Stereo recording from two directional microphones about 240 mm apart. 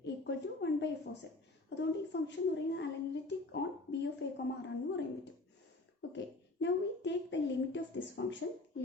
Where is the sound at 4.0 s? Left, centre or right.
Left.